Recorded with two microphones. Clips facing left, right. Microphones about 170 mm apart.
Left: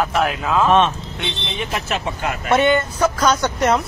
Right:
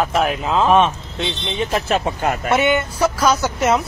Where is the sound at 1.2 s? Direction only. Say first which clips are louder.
Right 4 dB; 30° right (ahead or behind).